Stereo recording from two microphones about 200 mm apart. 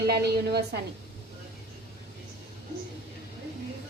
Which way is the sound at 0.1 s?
55° right (ahead or behind).